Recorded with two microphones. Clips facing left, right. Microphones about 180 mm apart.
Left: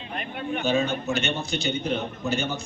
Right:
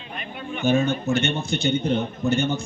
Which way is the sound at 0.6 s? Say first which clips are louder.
Right 4 dB; 50° right (ahead or behind).